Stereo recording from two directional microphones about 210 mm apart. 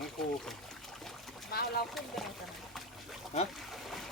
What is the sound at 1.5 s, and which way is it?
Speech, 50° left (ahead or behind).